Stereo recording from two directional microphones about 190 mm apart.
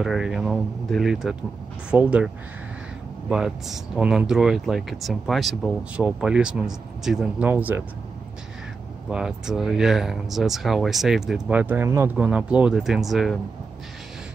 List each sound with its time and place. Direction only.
0.0 s speech: centre (ahead or behind)
9.1 s speech: 5° right (ahead or behind)